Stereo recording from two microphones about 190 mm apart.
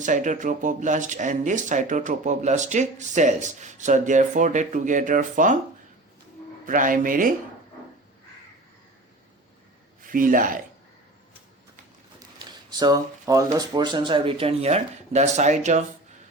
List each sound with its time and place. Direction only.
0.0 s speech: 40° right (ahead or behind)
6.7 s a man's voice: 45° right (ahead or behind)
10.0 s speech: 45° right (ahead or behind)
12.4 s speech: 20° right (ahead or behind); by 15.8 s 40° right (ahead or behind)